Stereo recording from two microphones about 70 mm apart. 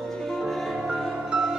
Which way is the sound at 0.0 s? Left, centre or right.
Centre.